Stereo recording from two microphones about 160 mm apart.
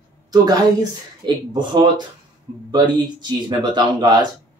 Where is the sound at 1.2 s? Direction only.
30° right (ahead or behind).